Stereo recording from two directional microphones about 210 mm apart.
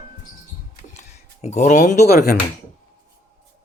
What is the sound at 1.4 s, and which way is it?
Speech, 35° left (ahead or behind).